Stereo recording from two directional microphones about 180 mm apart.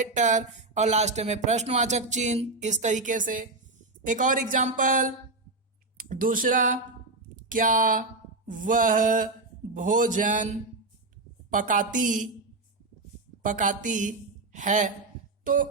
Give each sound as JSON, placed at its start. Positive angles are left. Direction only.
{"t": 0.0, "sound": "speech", "side_deg": -45}
{"t": 11.5, "sound": "speech", "side_deg": -45}
{"t": 13.4, "sound": "speech", "side_deg": -45}